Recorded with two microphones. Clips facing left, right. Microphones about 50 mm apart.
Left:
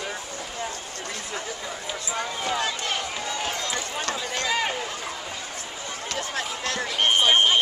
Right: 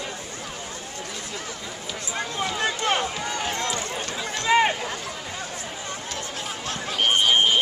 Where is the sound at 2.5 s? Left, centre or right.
Right.